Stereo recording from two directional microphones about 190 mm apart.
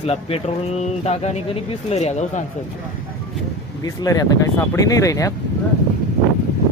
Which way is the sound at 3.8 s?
20° left (ahead or behind).